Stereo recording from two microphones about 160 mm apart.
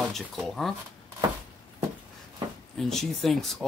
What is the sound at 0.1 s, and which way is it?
Speech, centre (ahead or behind).